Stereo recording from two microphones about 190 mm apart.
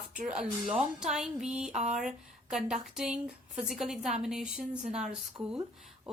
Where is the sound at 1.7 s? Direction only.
40° right (ahead or behind).